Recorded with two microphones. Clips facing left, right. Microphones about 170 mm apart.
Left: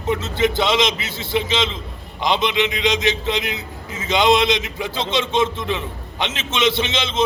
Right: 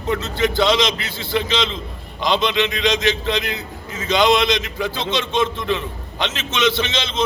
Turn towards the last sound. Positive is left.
turn(degrees=25)  # may be behind; listen again after turning